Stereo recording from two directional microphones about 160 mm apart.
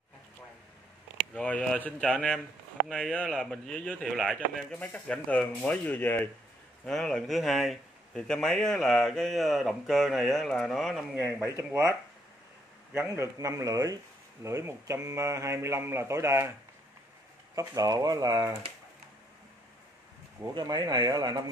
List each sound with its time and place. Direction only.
1.3 s a man's voice: 5° left (ahead or behind)
11.2 s speech: 15° right (ahead or behind)
12.9 s a man's voice: 15° right (ahead or behind)
17.6 s a man's voice: 25° right (ahead or behind)
20.4 s a man's voice: 25° right (ahead or behind)